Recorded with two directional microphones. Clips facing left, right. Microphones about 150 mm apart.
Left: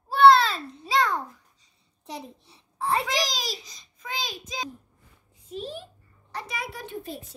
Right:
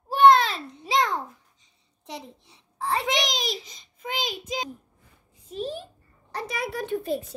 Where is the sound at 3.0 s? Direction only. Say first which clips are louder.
Right 1 dB; 20° right (ahead or behind).